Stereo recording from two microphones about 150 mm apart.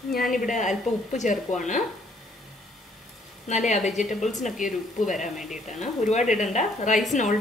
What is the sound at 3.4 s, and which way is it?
A woman's voice, 50° left (ahead or behind).